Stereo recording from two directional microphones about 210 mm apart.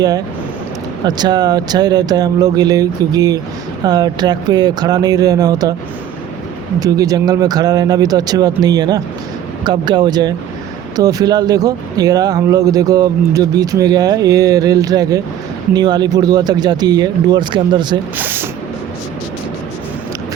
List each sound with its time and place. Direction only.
1.0 s speech: 20° right (ahead or behind)
6.7 s speech: 15° right (ahead or behind)
18.2 s speech: 10° right (ahead or behind)